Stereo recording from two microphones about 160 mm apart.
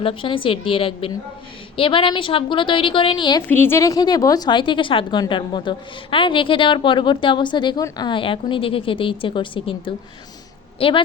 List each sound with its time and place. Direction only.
0.0 s a woman's voice: 35° left (ahead or behind)
3.5 s a woman's voice: 15° left (ahead or behind); by 11.0 s 35° left (ahead or behind)